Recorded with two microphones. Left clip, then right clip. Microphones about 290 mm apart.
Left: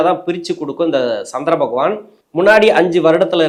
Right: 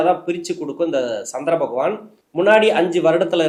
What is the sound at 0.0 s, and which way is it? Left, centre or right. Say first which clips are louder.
Speech: left 3 dB; left.